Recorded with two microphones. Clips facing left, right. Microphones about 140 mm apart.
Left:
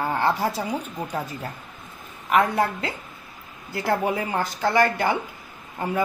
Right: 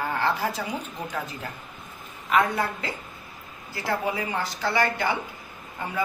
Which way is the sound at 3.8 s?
50° left (ahead or behind).